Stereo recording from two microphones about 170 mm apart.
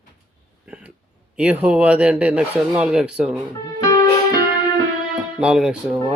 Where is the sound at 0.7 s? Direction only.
10° right (ahead or behind).